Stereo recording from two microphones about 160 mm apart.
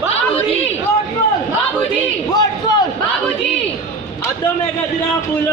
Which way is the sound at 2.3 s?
25° left (ahead or behind).